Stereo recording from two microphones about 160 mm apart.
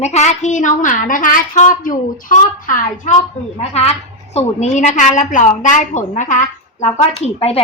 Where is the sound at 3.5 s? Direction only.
40° left (ahead or behind).